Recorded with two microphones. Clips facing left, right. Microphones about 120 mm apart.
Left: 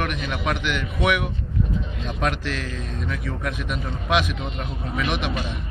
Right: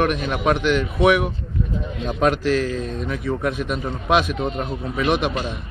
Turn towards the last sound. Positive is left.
turn(degrees=-40)  # may be behind; listen again after turning